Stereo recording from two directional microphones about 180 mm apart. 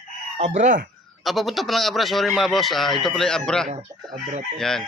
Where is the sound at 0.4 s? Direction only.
45° right (ahead or behind).